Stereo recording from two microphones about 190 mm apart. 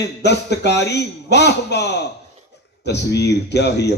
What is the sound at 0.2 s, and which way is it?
Speech, 65° left (ahead or behind).